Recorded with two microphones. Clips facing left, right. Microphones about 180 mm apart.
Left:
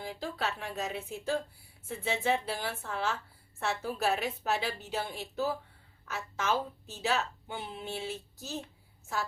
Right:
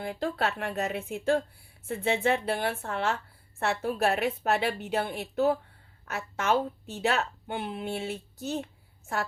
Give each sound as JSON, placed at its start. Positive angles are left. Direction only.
{"t": 0.0, "sound": "a woman's voice", "side_deg": -60}